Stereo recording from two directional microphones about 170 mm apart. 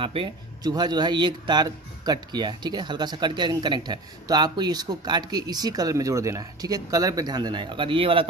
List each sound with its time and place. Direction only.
0.0 s speech: 30° right (ahead or behind)